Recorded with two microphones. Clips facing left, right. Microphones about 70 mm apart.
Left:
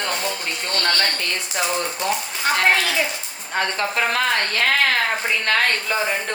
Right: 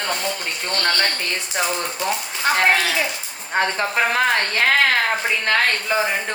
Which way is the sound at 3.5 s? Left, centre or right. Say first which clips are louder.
Right 2 dB; right.